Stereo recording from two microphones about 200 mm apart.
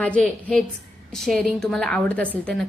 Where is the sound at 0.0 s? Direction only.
5° left (ahead or behind).